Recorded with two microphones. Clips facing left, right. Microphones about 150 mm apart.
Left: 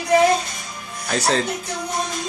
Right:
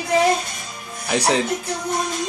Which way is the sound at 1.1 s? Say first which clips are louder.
Right 1 dB; 15° right (ahead or behind).